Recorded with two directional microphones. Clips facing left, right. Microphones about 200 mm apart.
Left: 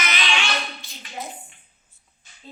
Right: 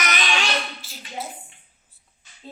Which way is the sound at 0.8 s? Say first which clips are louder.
Right 1 dB; 5° right (ahead or behind).